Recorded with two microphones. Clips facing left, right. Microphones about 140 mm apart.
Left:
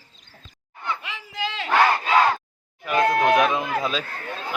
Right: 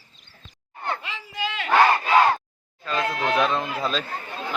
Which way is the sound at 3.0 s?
50° left (ahead or behind).